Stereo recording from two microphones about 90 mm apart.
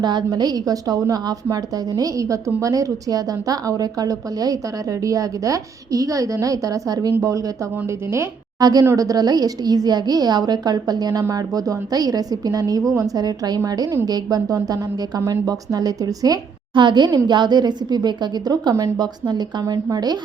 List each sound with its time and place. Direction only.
0.0 s a woman's voice: 50° right (ahead or behind); by 8.3 s 30° right (ahead or behind)
8.5 s a woman's voice: 45° right (ahead or behind)
16.7 s a woman's voice: 60° right (ahead or behind)